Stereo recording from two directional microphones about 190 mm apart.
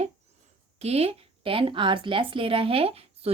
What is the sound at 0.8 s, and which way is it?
Speech, 35° right (ahead or behind).